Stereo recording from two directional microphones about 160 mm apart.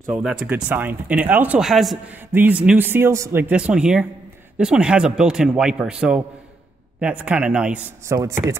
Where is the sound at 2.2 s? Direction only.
10° right (ahead or behind).